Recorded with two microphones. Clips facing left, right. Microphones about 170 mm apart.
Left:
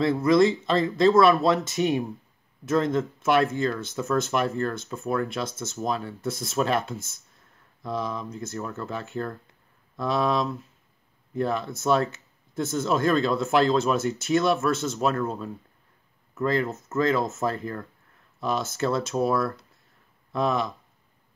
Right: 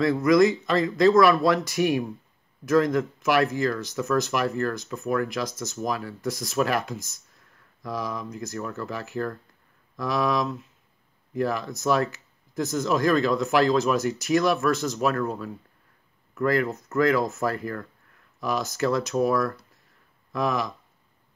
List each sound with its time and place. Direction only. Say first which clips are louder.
0.0 s speech: right 1 dB; 30° left (ahead or behind)